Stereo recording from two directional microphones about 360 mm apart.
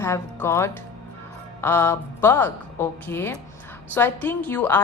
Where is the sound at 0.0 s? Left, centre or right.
Centre.